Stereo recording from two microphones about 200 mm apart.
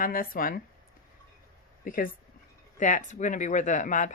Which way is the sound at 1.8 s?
40° left (ahead or behind).